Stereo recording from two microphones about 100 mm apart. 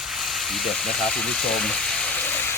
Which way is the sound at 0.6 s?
5° left (ahead or behind).